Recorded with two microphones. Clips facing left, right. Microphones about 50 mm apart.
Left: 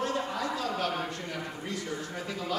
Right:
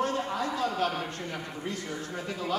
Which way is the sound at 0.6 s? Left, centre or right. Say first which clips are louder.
Right 2 dB; right.